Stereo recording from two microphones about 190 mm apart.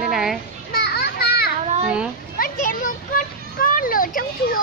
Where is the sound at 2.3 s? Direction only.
50° left (ahead or behind).